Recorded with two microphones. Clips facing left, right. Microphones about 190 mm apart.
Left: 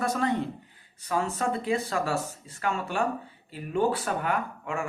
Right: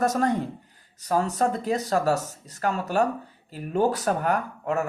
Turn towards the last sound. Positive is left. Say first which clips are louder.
# right 5 dB
turn(degrees=-40)  # may be behind; listen again after turning